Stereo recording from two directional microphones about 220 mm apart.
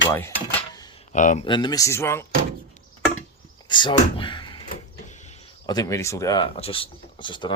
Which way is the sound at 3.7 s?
20° left (ahead or behind).